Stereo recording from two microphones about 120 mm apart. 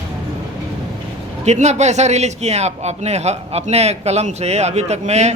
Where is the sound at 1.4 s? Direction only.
70° right (ahead or behind).